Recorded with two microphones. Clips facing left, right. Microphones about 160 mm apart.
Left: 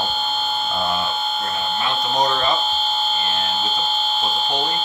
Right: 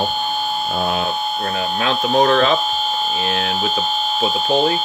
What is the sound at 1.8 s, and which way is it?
Speech, 80° right.